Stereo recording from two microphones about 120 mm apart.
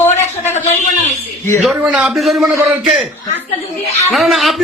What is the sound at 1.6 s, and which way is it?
Speech, 5° right (ahead or behind).